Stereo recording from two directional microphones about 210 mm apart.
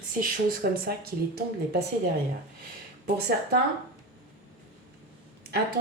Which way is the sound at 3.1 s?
50° right (ahead or behind).